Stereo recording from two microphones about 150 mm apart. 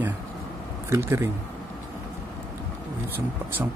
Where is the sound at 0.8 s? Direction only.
20° right (ahead or behind).